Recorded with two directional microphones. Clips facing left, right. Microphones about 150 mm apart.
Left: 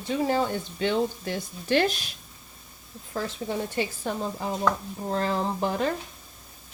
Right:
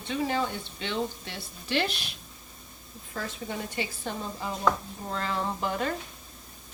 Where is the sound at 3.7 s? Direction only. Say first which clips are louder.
Left 5 dB; 40° left (ahead or behind).